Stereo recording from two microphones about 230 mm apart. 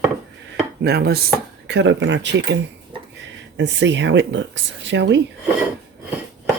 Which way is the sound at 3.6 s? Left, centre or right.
Right.